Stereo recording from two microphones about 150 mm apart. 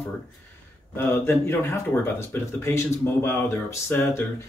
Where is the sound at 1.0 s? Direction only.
15° left (ahead or behind).